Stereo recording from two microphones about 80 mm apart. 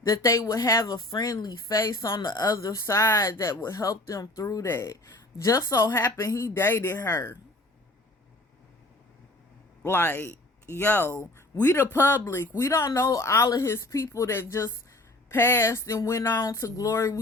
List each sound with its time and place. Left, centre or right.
0.0 s speech: left
0.9 s speech: left
1.3 s speech: left
2.1 s speech: left
6.6 s speech: left
9.8 s a man's voice: left
12.5 s speech: left